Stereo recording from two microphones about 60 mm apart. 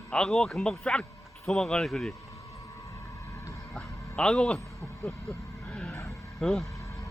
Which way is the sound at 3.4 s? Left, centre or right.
Left.